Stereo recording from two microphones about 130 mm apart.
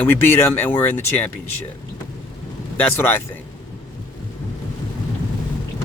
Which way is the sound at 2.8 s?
15° left (ahead or behind).